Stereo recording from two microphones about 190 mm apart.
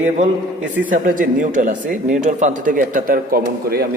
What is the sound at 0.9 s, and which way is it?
Speech, 45° right (ahead or behind).